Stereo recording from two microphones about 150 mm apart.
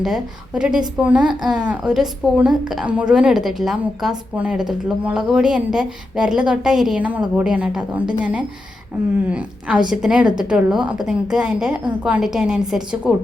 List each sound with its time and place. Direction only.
0.0 s a woman's voice: 5° right (ahead or behind)
1.2 s a woman's voice: 30° right (ahead or behind)
1.6 s a woman's voice: 5° right (ahead or behind)